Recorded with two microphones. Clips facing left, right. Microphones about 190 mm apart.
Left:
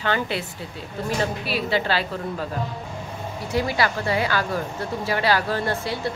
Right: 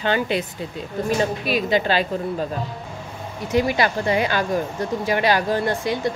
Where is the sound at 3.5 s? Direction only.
20° right (ahead or behind).